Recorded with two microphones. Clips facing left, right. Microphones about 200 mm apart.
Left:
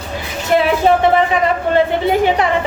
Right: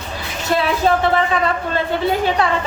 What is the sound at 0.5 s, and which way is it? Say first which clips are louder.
Speech: left 4 dB; 20° left (ahead or behind).